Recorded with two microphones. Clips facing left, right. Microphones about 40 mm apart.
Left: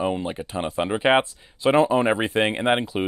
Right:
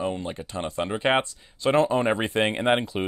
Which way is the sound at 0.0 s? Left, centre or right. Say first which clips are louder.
Left 4 dB; centre.